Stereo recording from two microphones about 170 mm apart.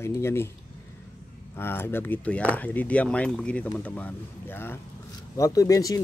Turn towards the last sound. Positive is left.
turn(degrees=20)  # may be behind; listen again after turning